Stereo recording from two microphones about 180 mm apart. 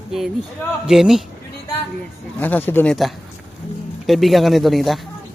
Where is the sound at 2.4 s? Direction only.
10° left (ahead or behind).